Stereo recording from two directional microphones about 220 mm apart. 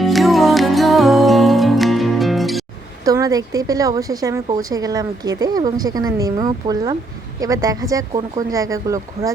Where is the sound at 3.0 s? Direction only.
15° right (ahead or behind).